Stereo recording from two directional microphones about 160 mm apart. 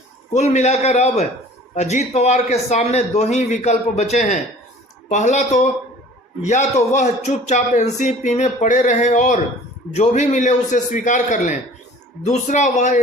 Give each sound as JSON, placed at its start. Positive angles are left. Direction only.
{"t": 0.3, "sound": "speech", "side_deg": 45}